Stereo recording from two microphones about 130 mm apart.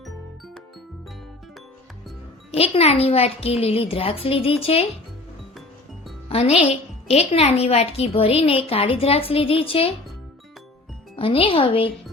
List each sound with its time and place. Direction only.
2.7 s a woman's voice: 50° left (ahead or behind)
6.2 s a woman's voice: 50° left (ahead or behind)
11.2 s a woman's voice: 45° left (ahead or behind)